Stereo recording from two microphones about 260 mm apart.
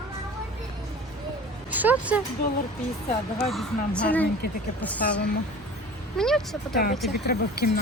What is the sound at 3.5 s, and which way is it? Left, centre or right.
A woman's voice, centre.